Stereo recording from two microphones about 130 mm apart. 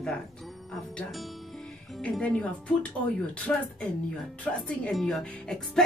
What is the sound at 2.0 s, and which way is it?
Speech, 10° left (ahead or behind).